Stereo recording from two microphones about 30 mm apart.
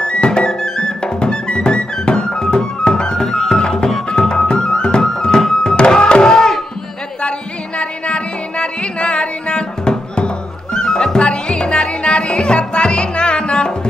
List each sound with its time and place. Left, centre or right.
0.0 s music: left
0.5 s music: left
6.2 s a sound: centre
7.2 s music: left
10.8 s music: centre
11.1 s music: left